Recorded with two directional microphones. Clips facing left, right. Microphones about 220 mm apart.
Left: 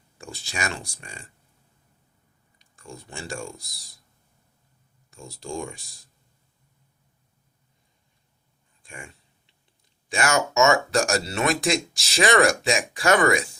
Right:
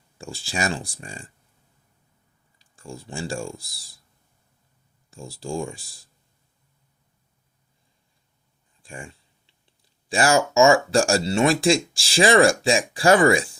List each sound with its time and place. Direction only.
0.2 s speech: 30° right (ahead or behind)
2.6 s speech: 30° right (ahead or behind)
5.1 s speech: 30° right (ahead or behind)
8.8 s a sound: 30° right (ahead or behind)
10.1 s speech: 30° right (ahead or behind)